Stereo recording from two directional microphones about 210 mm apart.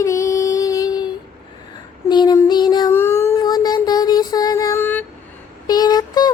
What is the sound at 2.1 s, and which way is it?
Music, 20° left (ahead or behind).